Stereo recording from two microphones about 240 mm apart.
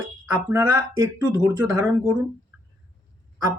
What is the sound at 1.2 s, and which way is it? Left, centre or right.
Speech, centre.